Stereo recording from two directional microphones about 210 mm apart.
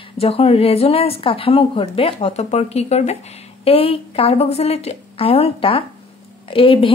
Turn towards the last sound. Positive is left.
turn(degrees=25)  # may be behind; listen again after turning